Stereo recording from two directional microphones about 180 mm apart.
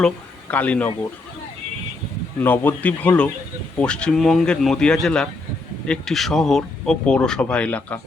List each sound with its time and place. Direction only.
0.5 s speech: 10° left (ahead or behind)
2.4 s speech: 10° left (ahead or behind)